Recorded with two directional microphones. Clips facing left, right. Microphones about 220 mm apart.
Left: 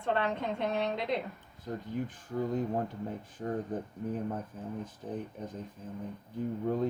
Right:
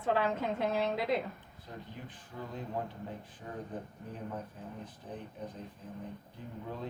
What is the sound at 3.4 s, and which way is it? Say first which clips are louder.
Speech: left 12 dB; 50° left (ahead or behind).